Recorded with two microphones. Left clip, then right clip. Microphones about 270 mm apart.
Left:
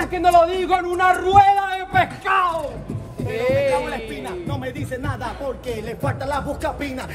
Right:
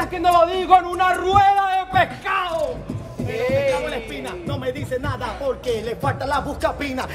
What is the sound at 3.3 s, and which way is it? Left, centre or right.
Speech, left.